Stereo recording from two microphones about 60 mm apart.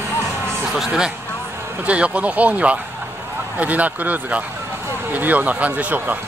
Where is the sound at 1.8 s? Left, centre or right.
Right.